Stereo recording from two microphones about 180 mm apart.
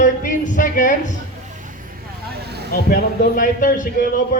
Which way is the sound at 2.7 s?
50° left (ahead or behind).